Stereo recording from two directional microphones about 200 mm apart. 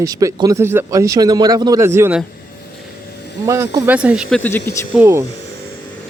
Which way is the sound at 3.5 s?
15° right (ahead or behind).